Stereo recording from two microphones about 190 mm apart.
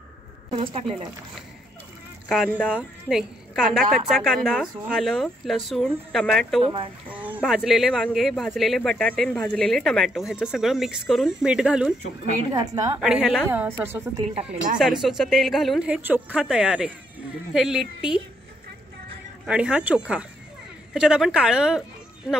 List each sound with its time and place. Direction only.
0.6 s speech: 30° right (ahead or behind)
2.2 s speech: centre (ahead or behind)
6.6 s a woman's voice: 25° right (ahead or behind)
7.3 s speech: centre (ahead or behind)
12.5 s a woman's voice: 20° right (ahead or behind)
13.0 s speech: centre (ahead or behind)
13.5 s a woman's voice: 10° right (ahead or behind)
14.1 s a woman's voice: 30° right (ahead or behind)
14.8 s speech: centre (ahead or behind)
19.4 s speech: 5° right (ahead or behind)